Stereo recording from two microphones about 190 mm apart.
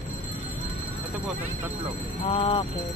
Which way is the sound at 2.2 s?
30° left (ahead or behind).